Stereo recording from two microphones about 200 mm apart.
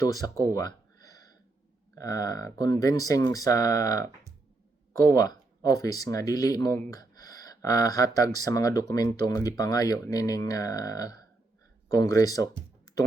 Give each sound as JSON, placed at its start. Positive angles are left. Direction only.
{"t": 0.0, "sound": "speech", "side_deg": 15}
{"t": 2.0, "sound": "speech", "side_deg": 20}